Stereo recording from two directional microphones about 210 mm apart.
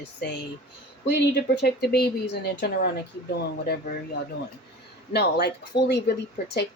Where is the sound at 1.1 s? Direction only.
55° left (ahead or behind).